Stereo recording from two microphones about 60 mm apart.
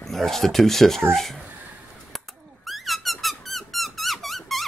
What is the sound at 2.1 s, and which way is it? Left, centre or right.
Squeak, centre.